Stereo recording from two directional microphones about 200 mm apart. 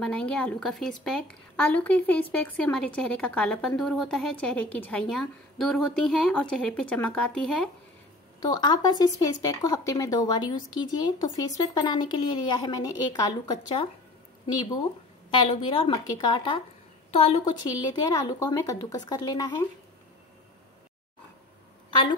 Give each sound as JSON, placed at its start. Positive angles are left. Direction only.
{"t": 0.0, "sound": "a woman's voice", "side_deg": 5}
{"t": 8.4, "sound": "speech", "side_deg": 20}
{"t": 15.5, "sound": "speech", "side_deg": 25}